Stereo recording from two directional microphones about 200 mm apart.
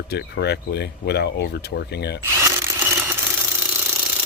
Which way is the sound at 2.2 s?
15° right (ahead or behind).